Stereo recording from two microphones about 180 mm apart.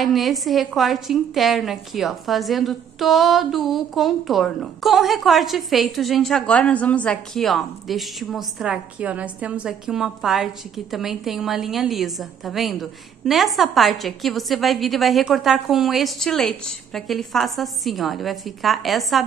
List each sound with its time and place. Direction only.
0.0 s a woman's voice: centre (ahead or behind)